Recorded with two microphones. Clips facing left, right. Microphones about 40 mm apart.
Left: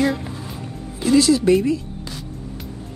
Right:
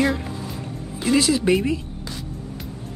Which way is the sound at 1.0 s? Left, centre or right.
Right.